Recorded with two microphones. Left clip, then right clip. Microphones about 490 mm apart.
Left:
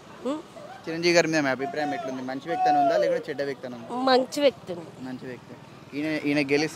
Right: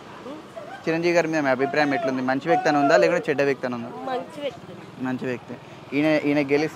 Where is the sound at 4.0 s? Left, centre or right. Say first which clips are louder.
Left 10 dB; left.